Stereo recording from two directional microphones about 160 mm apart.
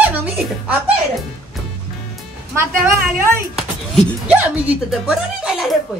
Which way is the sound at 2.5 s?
15° right (ahead or behind).